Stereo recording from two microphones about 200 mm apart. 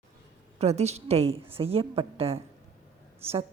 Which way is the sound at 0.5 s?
30° right (ahead or behind).